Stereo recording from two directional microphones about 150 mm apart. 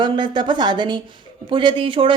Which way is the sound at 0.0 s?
30° right (ahead or behind).